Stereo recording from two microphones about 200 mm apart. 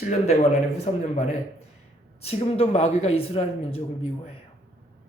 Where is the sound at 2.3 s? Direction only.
30° left (ahead or behind).